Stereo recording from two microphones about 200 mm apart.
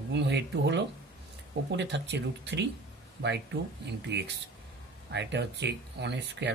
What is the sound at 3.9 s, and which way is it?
Speech, 60° right (ahead or behind).